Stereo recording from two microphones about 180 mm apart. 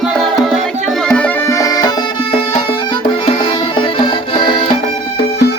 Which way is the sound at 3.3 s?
30° left (ahead or behind).